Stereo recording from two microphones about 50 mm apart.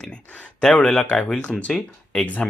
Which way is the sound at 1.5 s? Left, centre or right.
Centre.